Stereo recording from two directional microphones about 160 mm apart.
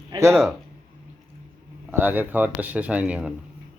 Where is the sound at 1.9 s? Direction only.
10° right (ahead or behind).